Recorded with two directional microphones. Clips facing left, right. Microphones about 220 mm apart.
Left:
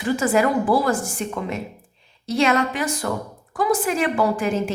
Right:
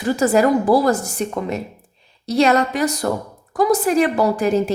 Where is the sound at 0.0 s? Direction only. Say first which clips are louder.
Right 4 dB; 40° right (ahead or behind).